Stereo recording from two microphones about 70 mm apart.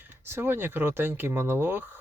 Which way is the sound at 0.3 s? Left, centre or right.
Right.